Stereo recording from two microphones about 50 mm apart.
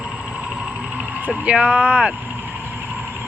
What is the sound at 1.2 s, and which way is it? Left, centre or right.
Speech, right.